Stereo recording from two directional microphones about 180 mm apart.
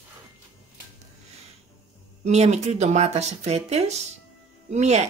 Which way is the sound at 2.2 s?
40° right (ahead or behind).